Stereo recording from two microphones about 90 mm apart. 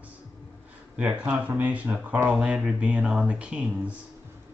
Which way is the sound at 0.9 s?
15° right (ahead or behind).